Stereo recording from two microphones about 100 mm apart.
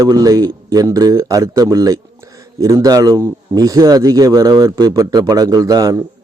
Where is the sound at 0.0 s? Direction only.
35° right (ahead or behind).